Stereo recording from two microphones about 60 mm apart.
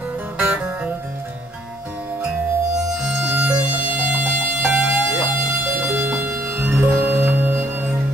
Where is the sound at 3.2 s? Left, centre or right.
Right.